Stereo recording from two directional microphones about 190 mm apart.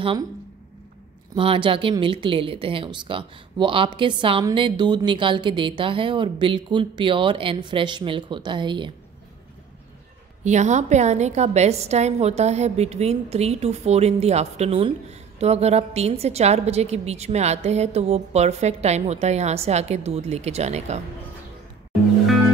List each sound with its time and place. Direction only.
1.3 s a woman's voice: 30° right (ahead or behind)
10.4 s a woman's voice: 40° right (ahead or behind)